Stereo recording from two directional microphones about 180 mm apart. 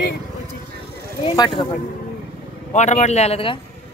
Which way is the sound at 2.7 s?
40° left (ahead or behind).